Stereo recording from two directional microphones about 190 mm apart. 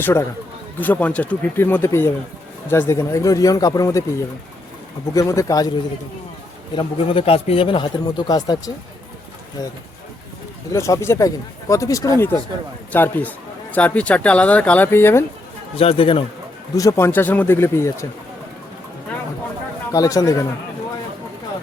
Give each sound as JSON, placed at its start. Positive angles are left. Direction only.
{"t": 0.0, "sound": "a man's voice", "side_deg": 15}
{"t": 5.1, "sound": "a man's voice", "side_deg": 15}
{"t": 6.7, "sound": "a man's voice", "side_deg": 30}
{"t": 15.8, "sound": "speech", "side_deg": 30}
{"t": 16.7, "sound": "a man's voice", "side_deg": 15}
{"t": 19.9, "sound": "a man's voice", "side_deg": 15}